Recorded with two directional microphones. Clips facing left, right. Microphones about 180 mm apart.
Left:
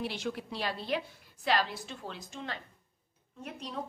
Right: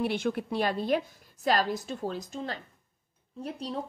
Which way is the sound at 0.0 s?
55° right (ahead or behind).